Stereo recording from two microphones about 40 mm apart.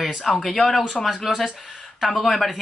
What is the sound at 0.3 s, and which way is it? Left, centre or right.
Speech, centre.